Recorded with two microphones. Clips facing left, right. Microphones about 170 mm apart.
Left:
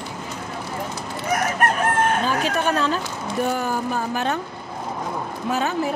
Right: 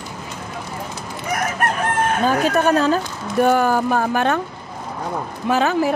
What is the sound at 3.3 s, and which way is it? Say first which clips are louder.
Speech: right 8 dB; 70° right (ahead or behind).